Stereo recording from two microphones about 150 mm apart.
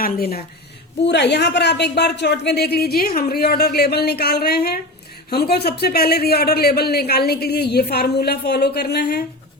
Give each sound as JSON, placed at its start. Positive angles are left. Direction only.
{"t": 0.0, "sound": "a man's voice", "side_deg": 90}